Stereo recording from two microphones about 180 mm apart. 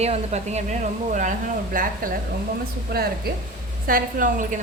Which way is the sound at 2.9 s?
60° right (ahead or behind).